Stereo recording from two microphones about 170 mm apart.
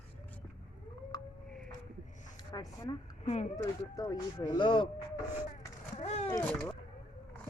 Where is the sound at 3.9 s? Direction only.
20° left (ahead or behind).